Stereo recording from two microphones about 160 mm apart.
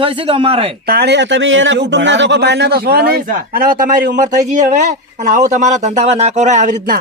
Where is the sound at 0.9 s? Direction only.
90° right; by 7.0 s 55° right (ahead or behind).